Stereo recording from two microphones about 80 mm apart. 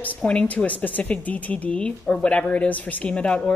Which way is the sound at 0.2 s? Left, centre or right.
Centre.